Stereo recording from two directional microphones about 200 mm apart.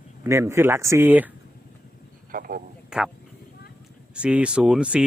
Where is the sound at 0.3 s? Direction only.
15° right (ahead or behind).